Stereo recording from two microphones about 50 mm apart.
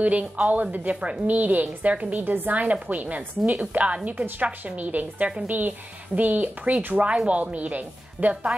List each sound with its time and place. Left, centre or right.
0.0 s a woman's voice: right
2.1 s a woman's voice: right